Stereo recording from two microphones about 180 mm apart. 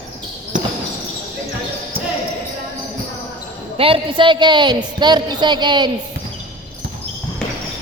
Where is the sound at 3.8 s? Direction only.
30° right (ahead or behind).